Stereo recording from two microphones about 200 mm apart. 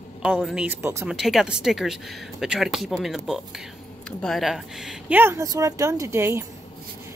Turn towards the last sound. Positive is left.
turn(degrees=-15)  # may be behind; listen again after turning